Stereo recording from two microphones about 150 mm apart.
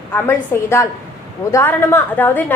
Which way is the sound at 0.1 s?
15° left (ahead or behind).